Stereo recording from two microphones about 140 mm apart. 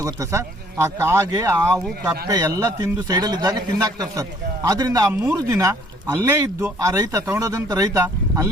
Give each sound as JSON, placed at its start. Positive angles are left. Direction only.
{"t": 0.0, "sound": "a man's voice", "side_deg": -20}